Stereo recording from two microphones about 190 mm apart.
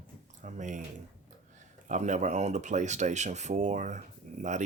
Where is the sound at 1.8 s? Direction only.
40° right (ahead or behind).